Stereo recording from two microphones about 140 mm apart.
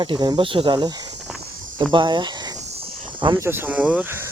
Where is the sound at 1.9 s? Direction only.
35° right (ahead or behind).